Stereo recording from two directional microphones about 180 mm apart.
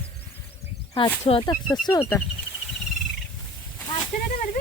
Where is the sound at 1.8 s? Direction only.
20° left (ahead or behind).